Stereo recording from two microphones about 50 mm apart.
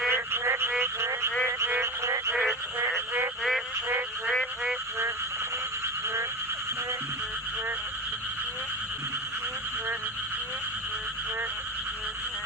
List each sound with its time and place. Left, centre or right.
0.1 s frog: right
1.8 s frog: right